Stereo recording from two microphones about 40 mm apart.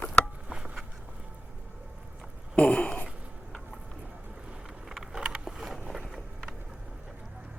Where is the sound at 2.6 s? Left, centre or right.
Left.